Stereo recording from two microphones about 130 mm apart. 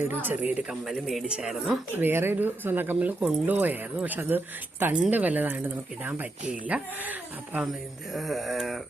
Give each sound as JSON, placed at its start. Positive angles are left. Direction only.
{"t": 0.1, "sound": "speech", "side_deg": -15}
{"t": 2.0, "sound": "speech", "side_deg": -15}
{"t": 7.7, "sound": "speech", "side_deg": 0}